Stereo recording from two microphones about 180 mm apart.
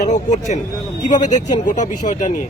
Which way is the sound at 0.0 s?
40° left (ahead or behind).